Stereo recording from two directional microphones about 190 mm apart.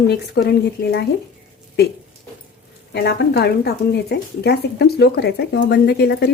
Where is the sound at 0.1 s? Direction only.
60° left (ahead or behind).